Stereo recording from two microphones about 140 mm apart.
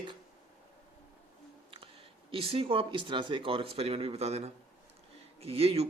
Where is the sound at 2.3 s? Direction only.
40° right (ahead or behind).